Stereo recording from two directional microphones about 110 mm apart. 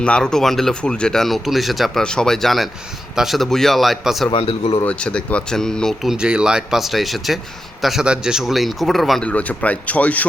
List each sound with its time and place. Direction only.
0.0 s speech: 5° left (ahead or behind)
4.3 s speech: 55° left (ahead or behind)
4.8 s speech: 10° left (ahead or behind)
9.3 s speech: 15° left (ahead or behind)